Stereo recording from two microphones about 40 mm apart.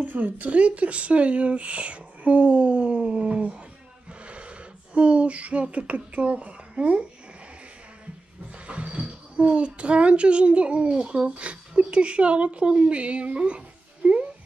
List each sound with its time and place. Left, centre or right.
0.0 s speech: right
8.6 s a child's voice: right
14.0 s speech: right